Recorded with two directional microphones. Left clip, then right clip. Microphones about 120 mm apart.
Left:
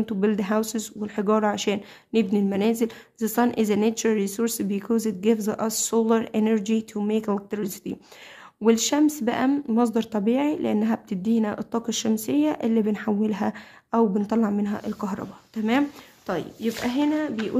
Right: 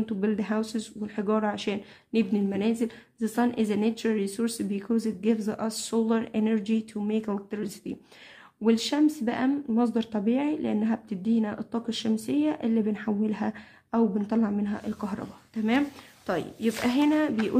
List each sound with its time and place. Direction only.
0.0 s speech: 35° left (ahead or behind)
16.3 s speech: 10° left (ahead or behind)
16.6 s speech: 10° right (ahead or behind)